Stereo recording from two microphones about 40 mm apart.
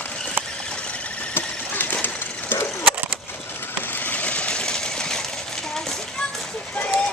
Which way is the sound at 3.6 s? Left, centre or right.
Left.